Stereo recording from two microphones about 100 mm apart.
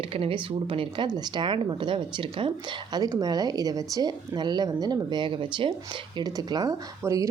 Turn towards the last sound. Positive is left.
turn(degrees=-30)  # may be behind; listen again after turning